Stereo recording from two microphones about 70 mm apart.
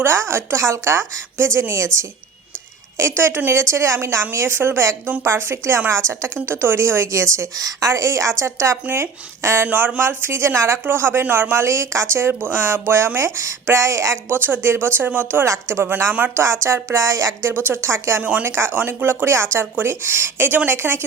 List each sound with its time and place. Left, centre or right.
0.0 s a woman's voice: right
3.2 s a woman's voice: right
9.6 s a woman's voice: right
12.1 s a woman's voice: right
14.3 s a woman's voice: right
16.4 s speech: right
17.5 s a woman's voice: right
18.2 s a woman's voice: right
18.4 s a woman's voice: right